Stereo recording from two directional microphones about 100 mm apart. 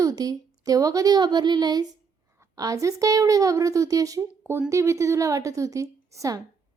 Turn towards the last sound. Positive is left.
turn(degrees=-35)  # may be behind; listen again after turning